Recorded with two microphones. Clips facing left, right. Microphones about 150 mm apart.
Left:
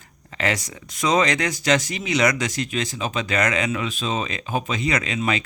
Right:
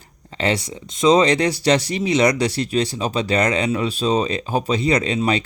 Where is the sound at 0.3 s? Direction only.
30° right (ahead or behind).